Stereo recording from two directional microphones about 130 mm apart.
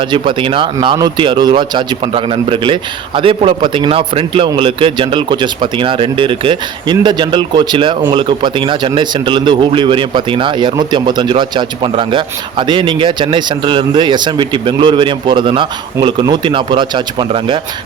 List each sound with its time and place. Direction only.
0.1 s a man's voice: 40° right (ahead or behind)